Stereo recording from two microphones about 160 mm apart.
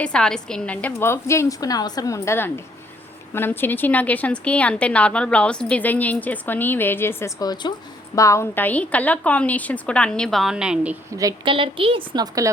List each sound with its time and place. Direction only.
0.0 s a woman's voice: 5° left (ahead or behind)
11.2 s a woman's voice: 25° right (ahead or behind)